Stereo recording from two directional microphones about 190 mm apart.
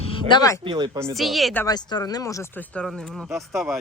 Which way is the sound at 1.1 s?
Centre (ahead or behind).